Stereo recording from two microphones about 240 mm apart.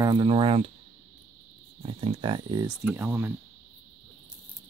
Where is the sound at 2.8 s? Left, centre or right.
Centre.